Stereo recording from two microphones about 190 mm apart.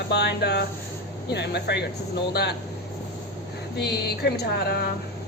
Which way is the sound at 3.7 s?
60° left (ahead or behind).